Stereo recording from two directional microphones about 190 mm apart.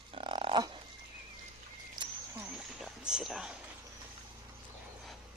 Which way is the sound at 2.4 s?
5° right (ahead or behind).